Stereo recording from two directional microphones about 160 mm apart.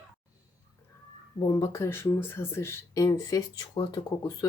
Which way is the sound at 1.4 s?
20° left (ahead or behind).